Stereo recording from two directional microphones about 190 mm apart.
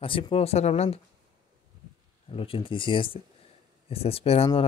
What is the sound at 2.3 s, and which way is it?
Speech, 30° left (ahead or behind).